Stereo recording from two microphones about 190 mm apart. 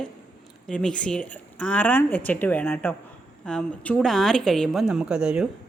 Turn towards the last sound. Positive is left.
turn(degrees=-5)  # may be behind; listen again after turning